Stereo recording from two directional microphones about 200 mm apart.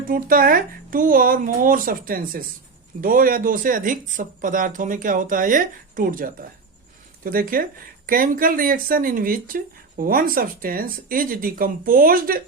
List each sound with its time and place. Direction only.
0.1 s speech: 45° right (ahead or behind)